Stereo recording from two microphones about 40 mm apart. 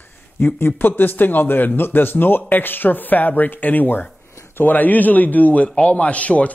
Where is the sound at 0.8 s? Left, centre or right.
Left.